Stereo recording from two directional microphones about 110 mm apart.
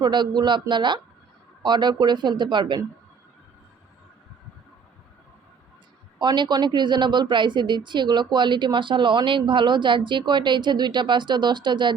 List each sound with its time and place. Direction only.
0.0 s a woman's voice: 40° right (ahead or behind)
6.1 s a woman's voice: 45° right (ahead or behind)